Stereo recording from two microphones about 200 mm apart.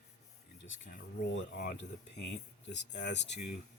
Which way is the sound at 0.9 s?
50° left (ahead or behind).